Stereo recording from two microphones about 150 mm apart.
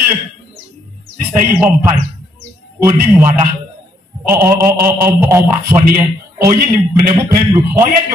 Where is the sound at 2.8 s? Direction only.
15° right (ahead or behind).